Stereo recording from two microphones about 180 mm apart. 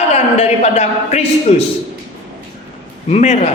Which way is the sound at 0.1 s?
40° left (ahead or behind).